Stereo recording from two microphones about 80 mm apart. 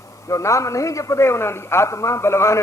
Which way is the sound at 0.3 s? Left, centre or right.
Left.